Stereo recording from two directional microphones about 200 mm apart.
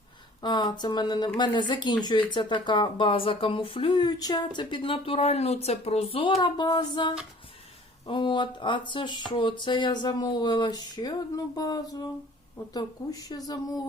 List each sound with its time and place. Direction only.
0.4 s speech: 20° left (ahead or behind)